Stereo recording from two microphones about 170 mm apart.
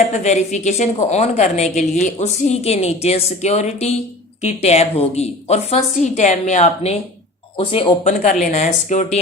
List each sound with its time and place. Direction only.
0.1 s a woman's voice: 40° left (ahead or behind)
7.5 s speech: 30° left (ahead or behind)
8.0 s a woman's voice: 45° left (ahead or behind)